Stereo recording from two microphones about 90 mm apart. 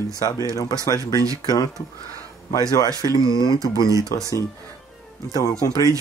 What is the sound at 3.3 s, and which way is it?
Speech, 55° left (ahead or behind).